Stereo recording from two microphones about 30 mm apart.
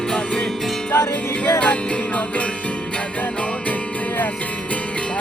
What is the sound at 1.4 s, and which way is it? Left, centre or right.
Music, left.